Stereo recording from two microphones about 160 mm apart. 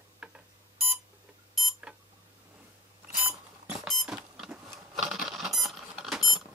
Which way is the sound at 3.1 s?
5° right (ahead or behind).